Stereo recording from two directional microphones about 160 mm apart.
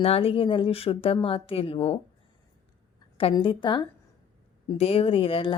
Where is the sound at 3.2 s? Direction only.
35° left (ahead or behind).